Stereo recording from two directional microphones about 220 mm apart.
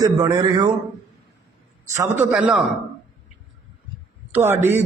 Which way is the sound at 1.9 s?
10° right (ahead or behind).